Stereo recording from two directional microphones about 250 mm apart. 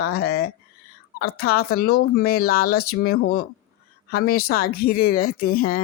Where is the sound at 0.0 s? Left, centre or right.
Left.